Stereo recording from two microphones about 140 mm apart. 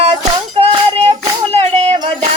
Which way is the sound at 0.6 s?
45° right (ahead or behind).